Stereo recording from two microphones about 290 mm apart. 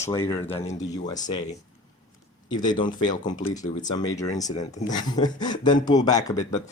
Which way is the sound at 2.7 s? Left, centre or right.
Centre.